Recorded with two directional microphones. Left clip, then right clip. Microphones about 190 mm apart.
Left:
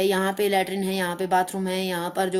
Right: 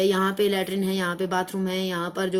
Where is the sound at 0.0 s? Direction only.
10° left (ahead or behind).